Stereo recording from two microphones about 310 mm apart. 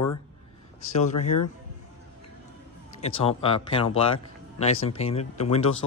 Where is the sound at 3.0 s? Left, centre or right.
Centre.